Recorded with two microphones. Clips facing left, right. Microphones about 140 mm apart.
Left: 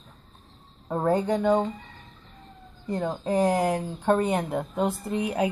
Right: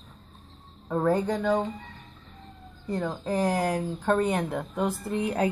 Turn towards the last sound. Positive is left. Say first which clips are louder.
# even
turn(degrees=10)  # may be behind; listen again after turning